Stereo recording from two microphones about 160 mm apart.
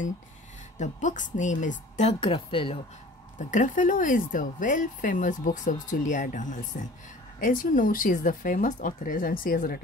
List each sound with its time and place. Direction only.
0.7 s speech: 50° left (ahead or behind); by 2.8 s 35° left (ahead or behind)
3.3 s speech: 50° left (ahead or behind)